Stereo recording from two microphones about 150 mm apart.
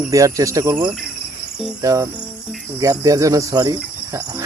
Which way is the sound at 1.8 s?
20° right (ahead or behind).